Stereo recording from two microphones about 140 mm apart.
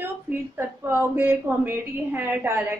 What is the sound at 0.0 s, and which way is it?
A woman's voice, 15° right (ahead or behind).